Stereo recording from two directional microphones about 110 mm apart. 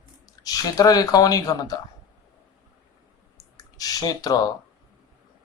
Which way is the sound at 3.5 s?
35° left (ahead or behind).